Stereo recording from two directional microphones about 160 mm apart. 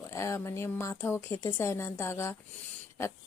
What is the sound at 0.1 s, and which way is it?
Speech, 15° left (ahead or behind).